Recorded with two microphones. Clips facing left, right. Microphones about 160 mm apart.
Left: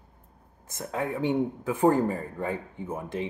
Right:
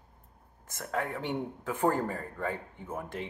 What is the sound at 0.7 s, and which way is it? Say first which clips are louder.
Speech: left 3 dB; 15° left (ahead or behind).